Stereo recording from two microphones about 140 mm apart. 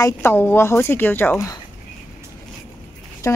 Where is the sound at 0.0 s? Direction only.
15° left (ahead or behind).